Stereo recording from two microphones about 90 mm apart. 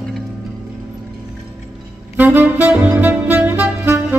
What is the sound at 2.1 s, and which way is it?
Saxophone, 20° right (ahead or behind).